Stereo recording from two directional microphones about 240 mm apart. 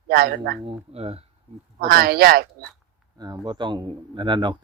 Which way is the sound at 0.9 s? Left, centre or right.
Right.